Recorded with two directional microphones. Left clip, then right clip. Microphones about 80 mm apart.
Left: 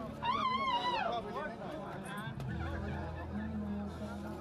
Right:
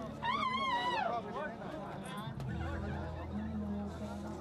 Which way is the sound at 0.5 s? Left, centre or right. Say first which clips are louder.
Left 1 dB; left.